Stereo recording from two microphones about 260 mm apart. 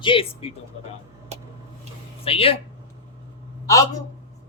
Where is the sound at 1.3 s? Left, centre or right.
Right.